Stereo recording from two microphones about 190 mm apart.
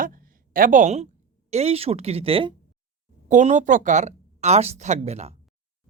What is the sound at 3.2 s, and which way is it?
Speech, 40° right (ahead or behind).